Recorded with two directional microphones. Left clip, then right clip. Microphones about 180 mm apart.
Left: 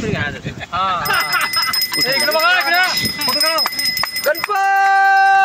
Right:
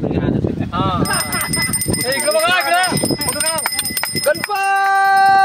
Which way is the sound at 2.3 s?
60° right (ahead or behind).